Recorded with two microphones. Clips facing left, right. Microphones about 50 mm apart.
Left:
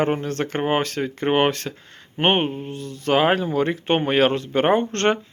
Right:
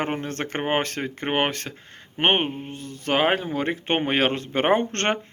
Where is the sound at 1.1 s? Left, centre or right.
Right.